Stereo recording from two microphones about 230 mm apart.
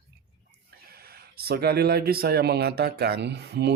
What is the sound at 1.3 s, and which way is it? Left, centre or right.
Speech, right.